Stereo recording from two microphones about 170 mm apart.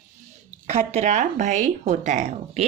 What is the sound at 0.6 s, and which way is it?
Speech, 40° right (ahead or behind).